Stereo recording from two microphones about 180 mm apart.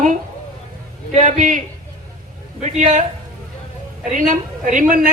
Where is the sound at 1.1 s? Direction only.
45° right (ahead or behind).